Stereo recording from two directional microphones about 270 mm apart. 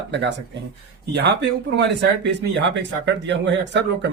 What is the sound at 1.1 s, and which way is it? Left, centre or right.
Speech, right.